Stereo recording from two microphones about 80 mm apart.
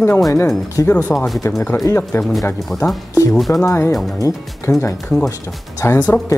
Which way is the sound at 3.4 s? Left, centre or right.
Centre.